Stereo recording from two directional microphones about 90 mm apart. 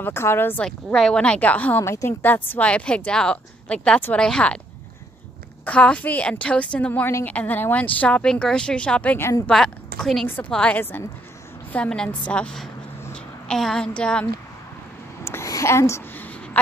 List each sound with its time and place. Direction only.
0.0 s speech: 25° left (ahead or behind)
0.7 s speech: 5° left (ahead or behind)
1.8 s speech: 30° left (ahead or behind); by 4.6 s 10° left (ahead or behind)
5.7 s speech: 15° left (ahead or behind)
10.8 s speech: 25° left (ahead or behind)
11.7 s a woman's voice: 10° left (ahead or behind)
15.2 s a sound: 35° left (ahead or behind)